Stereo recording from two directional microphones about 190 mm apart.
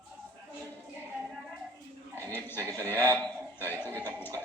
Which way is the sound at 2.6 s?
10° left (ahead or behind).